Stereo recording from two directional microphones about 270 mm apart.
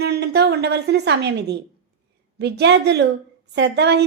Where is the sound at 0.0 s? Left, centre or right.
Right.